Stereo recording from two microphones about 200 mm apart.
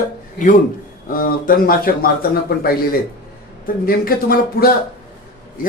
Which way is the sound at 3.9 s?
45° left (ahead or behind).